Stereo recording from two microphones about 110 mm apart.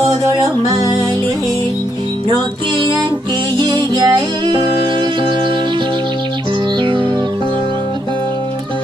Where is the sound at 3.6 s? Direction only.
40° right (ahead or behind).